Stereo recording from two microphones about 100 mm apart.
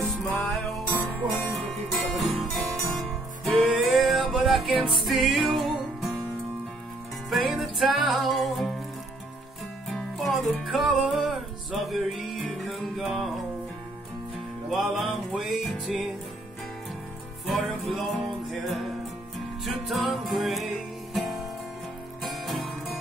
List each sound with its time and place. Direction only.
1.2 s music: centre (ahead or behind)
7.2 s music: centre (ahead or behind)
9.8 s music: centre (ahead or behind)
14.7 s music: centre (ahead or behind)
17.5 s music: centre (ahead or behind)